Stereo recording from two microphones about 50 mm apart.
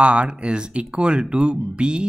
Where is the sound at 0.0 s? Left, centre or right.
Right.